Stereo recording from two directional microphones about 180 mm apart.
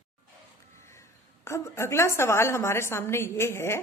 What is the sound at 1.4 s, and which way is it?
A woman's voice, 15° left (ahead or behind).